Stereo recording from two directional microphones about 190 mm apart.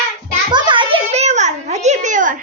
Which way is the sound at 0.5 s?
25° right (ahead or behind).